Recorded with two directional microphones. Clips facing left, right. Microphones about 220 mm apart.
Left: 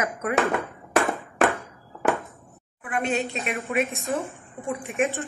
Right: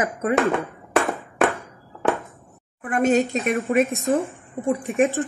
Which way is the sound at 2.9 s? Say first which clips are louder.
Right 7 dB; 45° right (ahead or behind).